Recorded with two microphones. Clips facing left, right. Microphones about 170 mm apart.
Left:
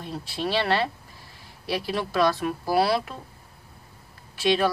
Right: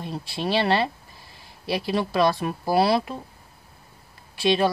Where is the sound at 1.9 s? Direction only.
25° right (ahead or behind).